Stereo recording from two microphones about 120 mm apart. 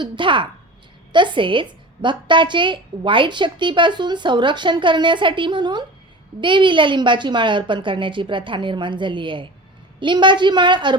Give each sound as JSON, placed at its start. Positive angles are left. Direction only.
{"t": 0.0, "sound": "a woman's voice", "side_deg": -45}